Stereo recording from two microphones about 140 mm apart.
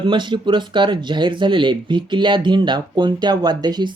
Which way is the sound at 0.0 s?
35° right (ahead or behind).